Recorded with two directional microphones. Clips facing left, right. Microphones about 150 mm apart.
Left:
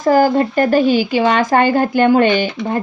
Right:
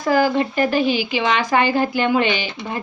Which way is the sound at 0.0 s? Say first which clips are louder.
Left 5 dB; 45° left (ahead or behind).